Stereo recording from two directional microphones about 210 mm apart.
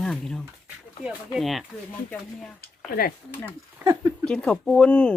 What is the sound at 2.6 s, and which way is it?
Speech, 45° left (ahead or behind).